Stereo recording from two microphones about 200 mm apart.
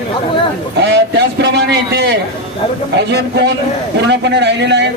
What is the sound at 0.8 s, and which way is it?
A man's voice, 60° right (ahead or behind).